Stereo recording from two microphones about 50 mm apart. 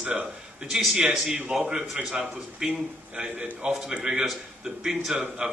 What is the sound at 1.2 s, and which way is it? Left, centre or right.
A man's voice, centre.